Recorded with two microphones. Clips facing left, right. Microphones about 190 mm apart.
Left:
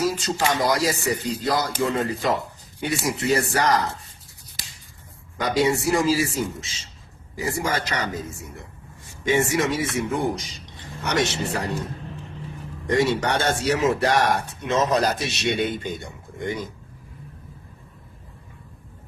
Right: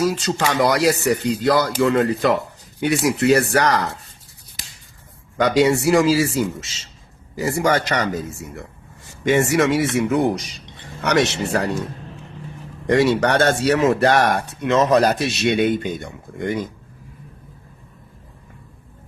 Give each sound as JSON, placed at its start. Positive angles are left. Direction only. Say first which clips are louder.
{"t": 0.0, "sound": "speech", "louder": "right 3 dB", "side_deg": -70}
{"t": 5.4, "sound": "a man's voice", "louder": "right 5 dB", "side_deg": -85}
{"t": 9.2, "sound": "speech", "louder": "right 5 dB", "side_deg": -70}
{"t": 12.9, "sound": "speech", "louder": "right 5 dB", "side_deg": -65}